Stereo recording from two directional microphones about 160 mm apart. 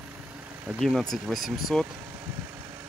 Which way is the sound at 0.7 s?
Centre (ahead or behind).